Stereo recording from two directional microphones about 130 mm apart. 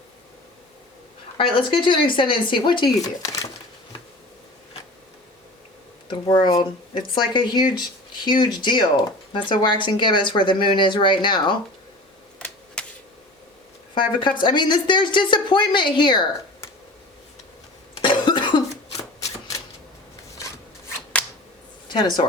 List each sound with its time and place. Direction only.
1.4 s speech: 40° left (ahead or behind)
6.1 s speech: 35° left (ahead or behind)
12.8 s a sound: 5° left (ahead or behind)
13.9 s speech: 35° left (ahead or behind)
18.0 s cough: 35° left (ahead or behind)
19.2 s shuffling cards: 25° left (ahead or behind)
21.8 s speech: 35° left (ahead or behind)